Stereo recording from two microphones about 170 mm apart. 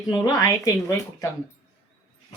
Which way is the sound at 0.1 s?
20° left (ahead or behind).